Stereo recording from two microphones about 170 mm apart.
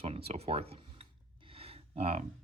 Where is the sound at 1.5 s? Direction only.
35° right (ahead or behind).